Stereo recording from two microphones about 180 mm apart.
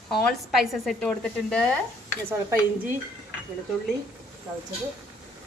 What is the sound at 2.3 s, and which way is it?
Speech, 10° right (ahead or behind).